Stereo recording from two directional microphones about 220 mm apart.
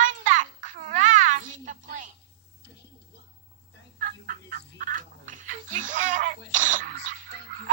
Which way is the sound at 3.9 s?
40° right (ahead or behind).